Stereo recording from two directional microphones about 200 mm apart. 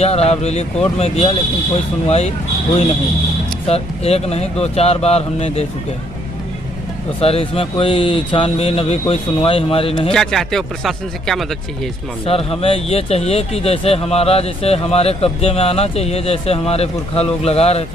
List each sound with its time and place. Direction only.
0.0 s speech: 30° left (ahead or behind)
3.6 s speech: 30° left (ahead or behind)
7.2 s speech: 30° left (ahead or behind)
10.1 s speech: centre (ahead or behind)
12.3 s speech: 30° left (ahead or behind)